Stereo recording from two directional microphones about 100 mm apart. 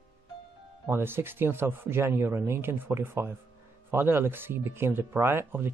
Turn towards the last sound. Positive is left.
turn(degrees=-20)  # may be behind; listen again after turning